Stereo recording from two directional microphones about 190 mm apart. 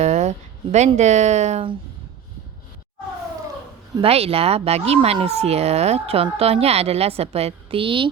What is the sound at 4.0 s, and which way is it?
Speech, 30° right (ahead or behind).